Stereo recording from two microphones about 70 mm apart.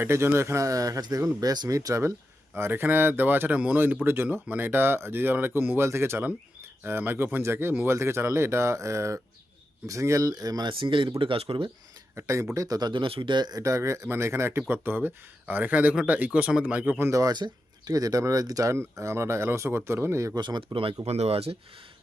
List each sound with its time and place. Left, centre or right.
0.0 s speech: right
10.3 s speech: right
11.5 s speech: right
12.1 s speech: right
12.5 s speech: right
13.3 s speech: right
13.6 s speech: right
17.1 s speech: right
17.3 s speech: right
20.3 s speech: right
20.7 s speech: right